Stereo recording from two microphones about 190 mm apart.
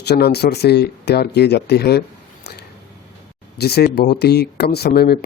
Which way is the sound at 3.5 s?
55° left (ahead or behind).